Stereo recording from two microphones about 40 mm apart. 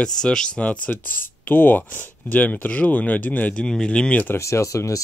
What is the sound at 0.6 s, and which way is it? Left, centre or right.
Speech, left.